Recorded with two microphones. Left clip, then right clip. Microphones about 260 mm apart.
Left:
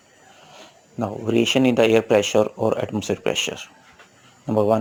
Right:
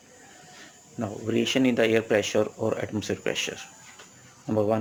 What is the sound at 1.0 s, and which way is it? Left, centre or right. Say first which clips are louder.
Speech: left 6 dB; centre.